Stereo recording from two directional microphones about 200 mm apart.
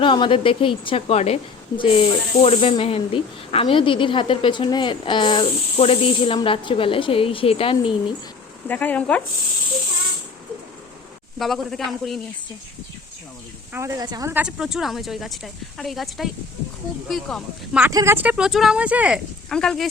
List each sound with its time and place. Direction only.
0.0 s speech: 25° left (ahead or behind)
8.6 s speech: 10° left (ahead or behind)
11.3 s speech: centre (ahead or behind)
13.7 s speech: 15° right (ahead or behind); by 17.8 s centre (ahead or behind)
17.8 s speech: 10° right (ahead or behind)